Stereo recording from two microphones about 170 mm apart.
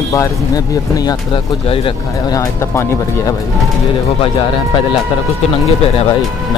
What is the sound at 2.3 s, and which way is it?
Speech, 15° left (ahead or behind).